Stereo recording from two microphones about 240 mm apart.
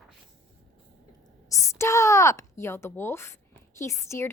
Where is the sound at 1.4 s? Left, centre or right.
Centre.